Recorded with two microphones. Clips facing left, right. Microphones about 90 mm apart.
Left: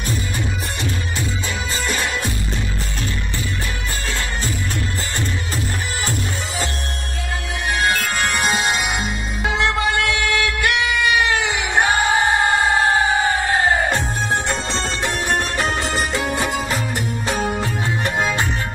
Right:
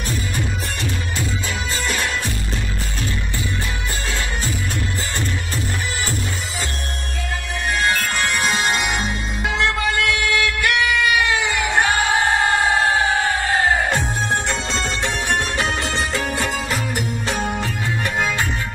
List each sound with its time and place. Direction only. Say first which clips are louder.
8.2 s music: left 1 dB; 20° left (ahead or behind)
12.0 s music: left 1 dB; 5° left (ahead or behind)
18.0 s music: left 1 dB; 25° left (ahead or behind)